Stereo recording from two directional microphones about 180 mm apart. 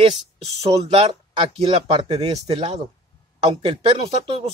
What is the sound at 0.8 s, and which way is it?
Speech, 30° right (ahead or behind).